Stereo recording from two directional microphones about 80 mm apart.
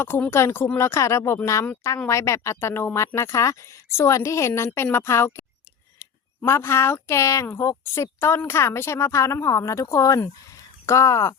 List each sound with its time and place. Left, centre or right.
0.3 s speech: left